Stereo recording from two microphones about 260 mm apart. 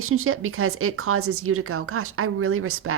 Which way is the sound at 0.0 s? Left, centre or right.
Right.